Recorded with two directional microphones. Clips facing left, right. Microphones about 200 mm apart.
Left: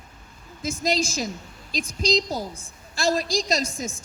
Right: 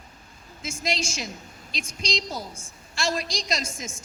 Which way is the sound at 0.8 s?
35° left (ahead or behind).